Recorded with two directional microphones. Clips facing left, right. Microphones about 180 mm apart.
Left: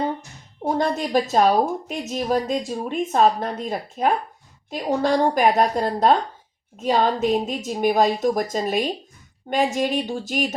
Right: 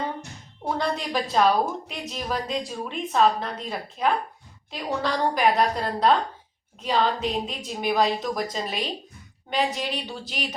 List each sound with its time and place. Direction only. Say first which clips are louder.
0.6 s a woman's voice: left 5 dB; 45° left (ahead or behind)